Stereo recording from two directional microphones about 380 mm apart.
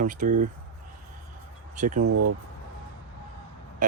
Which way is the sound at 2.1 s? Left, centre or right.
Right.